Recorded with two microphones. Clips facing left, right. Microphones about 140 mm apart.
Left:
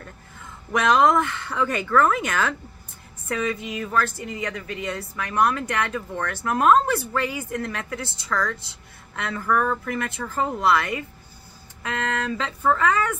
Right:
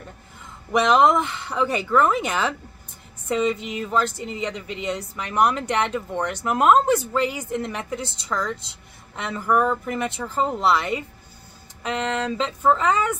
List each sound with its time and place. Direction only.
0.7 s a woman's voice: 15° right (ahead or behind)